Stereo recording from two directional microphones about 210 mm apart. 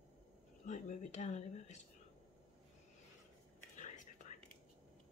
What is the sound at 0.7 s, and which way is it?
Speech, 35° left (ahead or behind).